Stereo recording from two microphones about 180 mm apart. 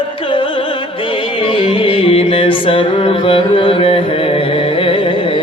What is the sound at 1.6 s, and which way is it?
Music, 30° left (ahead or behind).